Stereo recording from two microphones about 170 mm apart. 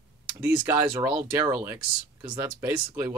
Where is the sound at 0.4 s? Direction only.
15° right (ahead or behind).